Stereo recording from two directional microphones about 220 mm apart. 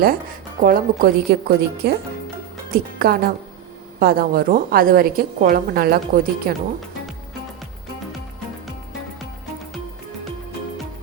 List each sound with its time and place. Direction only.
0.0 s speech: 40° right (ahead or behind)